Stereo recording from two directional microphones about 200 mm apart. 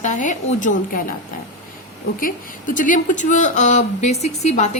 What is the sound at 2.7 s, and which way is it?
A woman's voice, 40° left (ahead or behind).